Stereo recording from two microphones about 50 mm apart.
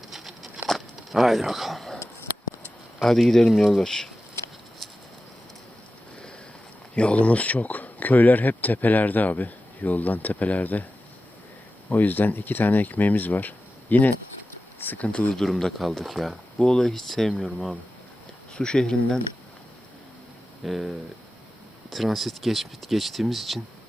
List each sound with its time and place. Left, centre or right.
0.1 s patter: centre
0.7 s a sound: centre
3.0 s speech: centre
6.9 s speech: left
11.9 s speech: left
15.3 s speech: centre
18.5 s speech: centre
20.7 s speech: centre